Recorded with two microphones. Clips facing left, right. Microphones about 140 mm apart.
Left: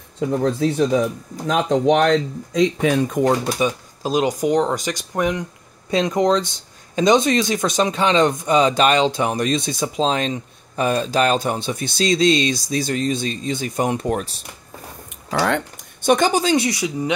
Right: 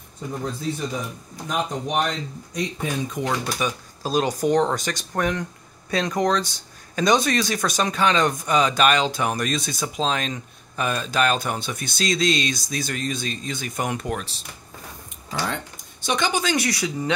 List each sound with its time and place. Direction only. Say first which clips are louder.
0.2 s speech: left 10 dB; 90° left
3.1 s speech: left 8 dB; 50° left (ahead or behind)
3.5 s speech: left 6 dB; 30° left (ahead or behind)
4.1 s speech: left 2 dB; 15° left (ahead or behind); by 14.2 s 30° left (ahead or behind)
15.3 s a sound: left 8 dB; 70° left (ahead or behind)
16.1 s speech: left 7 dB; 40° left (ahead or behind); by 17.1 s 20° left (ahead or behind)